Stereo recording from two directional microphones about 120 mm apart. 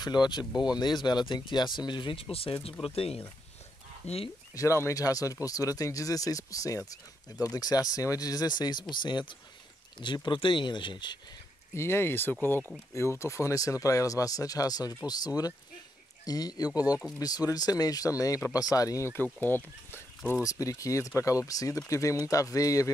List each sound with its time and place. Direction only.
0.0 s speech: 35° left (ahead or behind); by 4.3 s 55° left (ahead or behind)
4.8 s speech: 30° left (ahead or behind)
9.9 s speech: 40° left (ahead or behind)
11.7 s speech: 20° left (ahead or behind)
20.4 s speech: 25° left (ahead or behind)